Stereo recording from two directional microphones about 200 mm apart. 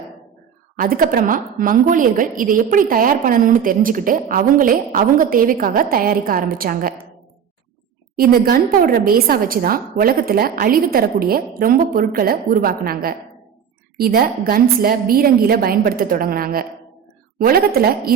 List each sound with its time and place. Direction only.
0.8 s a woman's voice: 45° right (ahead or behind)
8.1 s a woman's voice: 50° right (ahead or behind)